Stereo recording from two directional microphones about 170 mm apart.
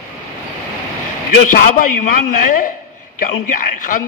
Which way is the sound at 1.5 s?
50° left (ahead or behind).